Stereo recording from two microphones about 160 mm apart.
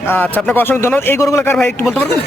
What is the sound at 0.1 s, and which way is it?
A man's voice, 10° left (ahead or behind).